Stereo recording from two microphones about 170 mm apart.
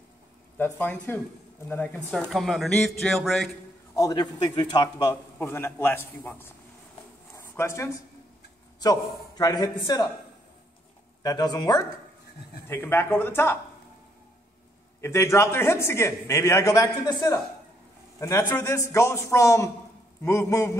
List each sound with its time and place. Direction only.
0.7 s a man's voice: 10° left (ahead or behind)
3.9 s a man's voice: 20° left (ahead or behind)
7.3 s a sound: 15° left (ahead or behind)
9.4 s speech: 25° left (ahead or behind)
11.2 s speech: 25° left (ahead or behind)
12.6 s a man's voice: 15° left (ahead or behind)
15.0 s a man's voice: 15° left (ahead or behind)